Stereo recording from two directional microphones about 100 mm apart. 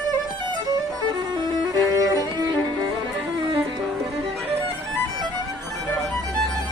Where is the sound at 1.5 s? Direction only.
35° right (ahead or behind).